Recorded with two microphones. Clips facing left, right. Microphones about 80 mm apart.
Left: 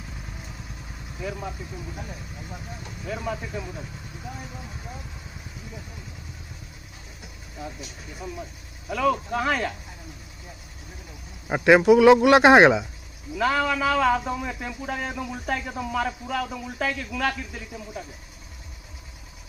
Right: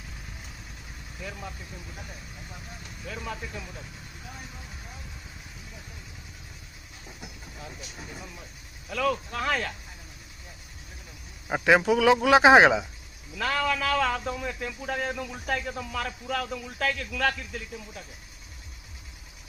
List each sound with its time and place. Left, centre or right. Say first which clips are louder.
1.2 s a man's voice: left 7 dB; centre
8.8 s a man's voice: left 4 dB; centre
11.4 s a man's voice: left 5 dB; centre